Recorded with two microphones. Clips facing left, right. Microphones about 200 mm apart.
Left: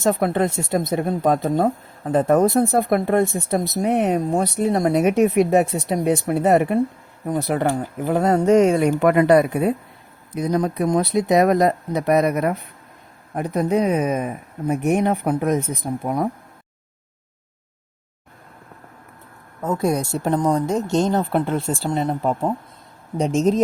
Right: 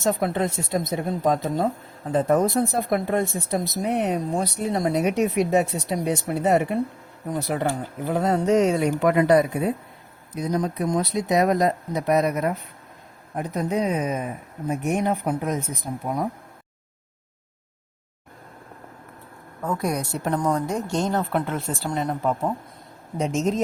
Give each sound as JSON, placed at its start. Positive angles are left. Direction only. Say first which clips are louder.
{"t": 0.0, "sound": "speech", "louder": "left 4 dB", "side_deg": 55}
{"t": 19.6, "sound": "a woman's voice", "louder": "left 5 dB", "side_deg": 25}